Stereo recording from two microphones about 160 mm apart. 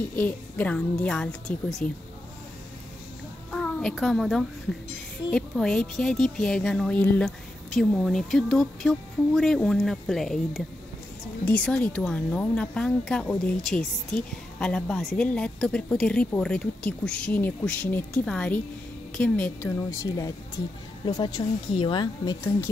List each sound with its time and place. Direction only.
0.1 s a woman's voice: 10° left (ahead or behind)
3.5 s a child's voice: centre (ahead or behind); by 22.4 s 30° left (ahead or behind)